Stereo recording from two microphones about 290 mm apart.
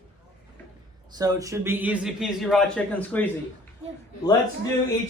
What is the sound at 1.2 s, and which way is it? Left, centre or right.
A man's voice, centre.